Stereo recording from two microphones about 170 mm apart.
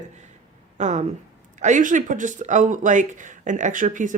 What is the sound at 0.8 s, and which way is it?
Speech, 45° right (ahead or behind).